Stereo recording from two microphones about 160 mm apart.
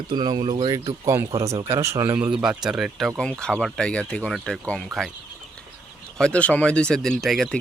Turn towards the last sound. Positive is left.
turn(degrees=0)  # may be behind; listen again after turning